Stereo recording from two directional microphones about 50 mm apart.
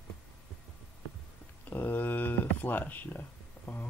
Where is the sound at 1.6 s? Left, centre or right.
Left.